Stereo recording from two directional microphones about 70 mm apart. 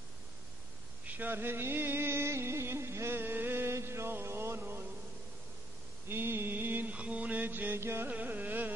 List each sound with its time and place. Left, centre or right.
1.0 s music: right
6.0 s mantra: right
8.1 s carnatic music: right